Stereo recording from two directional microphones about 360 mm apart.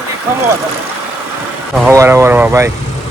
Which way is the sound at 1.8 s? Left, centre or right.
Centre.